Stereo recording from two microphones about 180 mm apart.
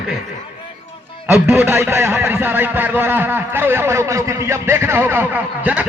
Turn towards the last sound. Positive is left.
turn(degrees=-10)  # may be behind; listen again after turning